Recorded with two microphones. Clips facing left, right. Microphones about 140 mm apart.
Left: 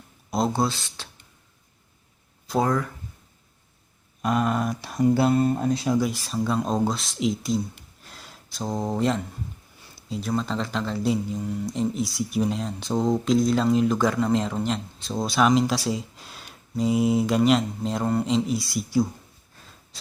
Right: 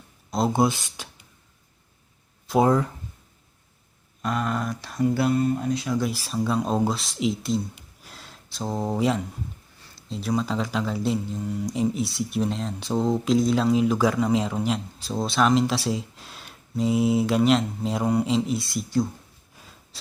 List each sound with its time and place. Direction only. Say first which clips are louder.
0.5 s speech: right 3 dB; 15° right (ahead or behind)
2.6 s speech: right 4 dB; 25° right (ahead or behind)
4.2 s speech: left 3 dB; 15° left (ahead or behind)
5.4 s speech: left 1 dB; 35° left (ahead or behind)
6.0 s speech: left 1 dB; 5° right (ahead or behind)
19.5 s a sound: right 1 dB; 5° right (ahead or behind)